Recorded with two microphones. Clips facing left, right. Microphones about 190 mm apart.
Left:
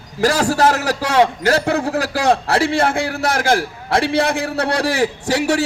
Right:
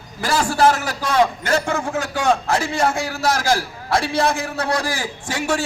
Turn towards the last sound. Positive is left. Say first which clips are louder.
# left 8 dB
turn(degrees=65)  # may be behind; listen again after turning